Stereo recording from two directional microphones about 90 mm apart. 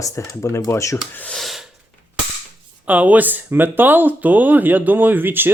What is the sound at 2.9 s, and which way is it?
Speech, 15° right (ahead or behind).